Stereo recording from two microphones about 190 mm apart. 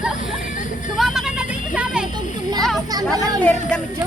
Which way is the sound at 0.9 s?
Centre (ahead or behind).